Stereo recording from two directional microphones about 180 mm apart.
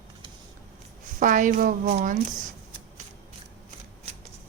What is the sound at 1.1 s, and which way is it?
A woman's voice, 45° right (ahead or behind).